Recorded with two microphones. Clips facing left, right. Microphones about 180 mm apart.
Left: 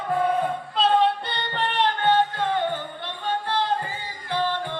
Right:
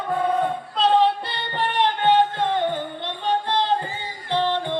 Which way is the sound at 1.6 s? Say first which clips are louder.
Right 2 dB; 15° right (ahead or behind).